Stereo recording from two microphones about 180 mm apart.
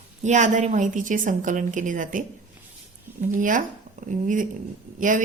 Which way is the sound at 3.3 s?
45° right (ahead or behind).